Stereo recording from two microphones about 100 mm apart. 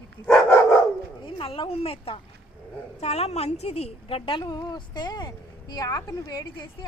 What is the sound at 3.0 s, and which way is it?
A woman's voice, 90° left.